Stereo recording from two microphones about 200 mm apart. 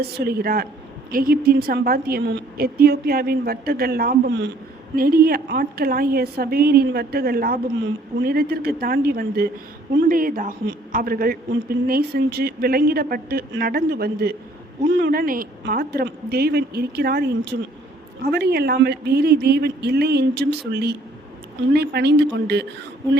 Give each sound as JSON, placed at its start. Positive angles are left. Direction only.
{"t": 0.2, "sound": "a woman's voice", "side_deg": -50}